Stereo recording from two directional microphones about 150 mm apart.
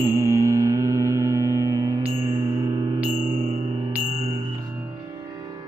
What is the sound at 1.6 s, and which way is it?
Music, 20° left (ahead or behind).